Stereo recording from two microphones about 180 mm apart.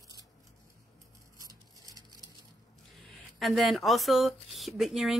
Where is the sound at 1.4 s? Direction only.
20° right (ahead or behind).